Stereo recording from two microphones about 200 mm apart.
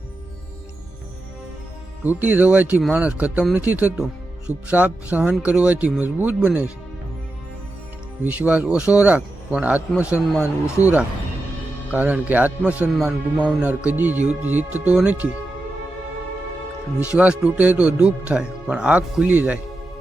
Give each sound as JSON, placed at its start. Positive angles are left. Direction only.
{"t": 2.0, "sound": "speech", "side_deg": -10}
{"t": 8.3, "sound": "speech", "side_deg": -5}
{"t": 11.9, "sound": "speech", "side_deg": -10}
{"t": 17.0, "sound": "speech", "side_deg": -5}